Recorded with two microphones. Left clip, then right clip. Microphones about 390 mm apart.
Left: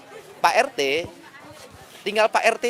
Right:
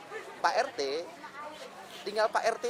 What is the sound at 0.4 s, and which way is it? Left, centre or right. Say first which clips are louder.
Speech: left 10 dB; left.